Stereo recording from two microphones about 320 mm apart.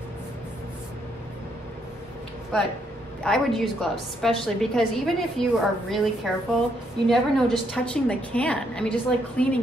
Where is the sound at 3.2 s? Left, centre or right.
Centre.